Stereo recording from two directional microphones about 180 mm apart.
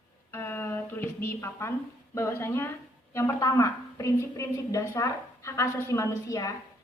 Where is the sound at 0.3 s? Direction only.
15° left (ahead or behind).